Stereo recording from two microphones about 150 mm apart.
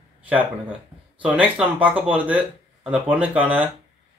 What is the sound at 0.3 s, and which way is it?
Speech, 10° right (ahead or behind).